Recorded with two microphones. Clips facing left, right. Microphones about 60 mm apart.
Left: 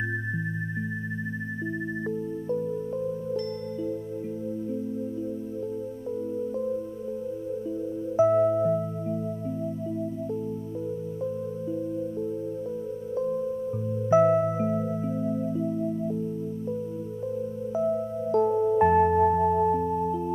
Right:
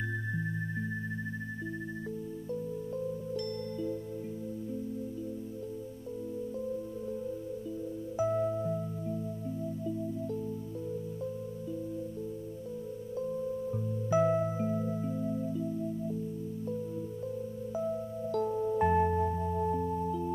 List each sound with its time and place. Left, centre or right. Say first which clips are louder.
8.2 s music: left 10 dB; left
14.1 s music: left 7 dB; left
17.7 s music: left 8 dB; left
19.2 s singing bowl: left 10 dB; left
19.7 s singing bowl: left 7 dB; left